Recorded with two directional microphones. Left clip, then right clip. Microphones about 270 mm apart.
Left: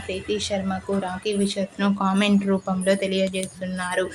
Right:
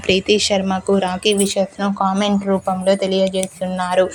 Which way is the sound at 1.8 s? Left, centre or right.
Centre.